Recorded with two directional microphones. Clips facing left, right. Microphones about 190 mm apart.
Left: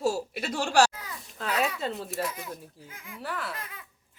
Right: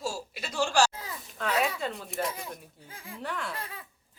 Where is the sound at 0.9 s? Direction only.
30° right (ahead or behind).